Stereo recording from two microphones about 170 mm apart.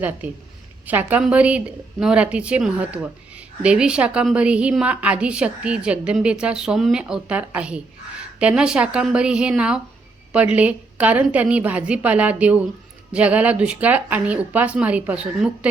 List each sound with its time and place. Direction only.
0.9 s a woman's voice: 10° right (ahead or behind)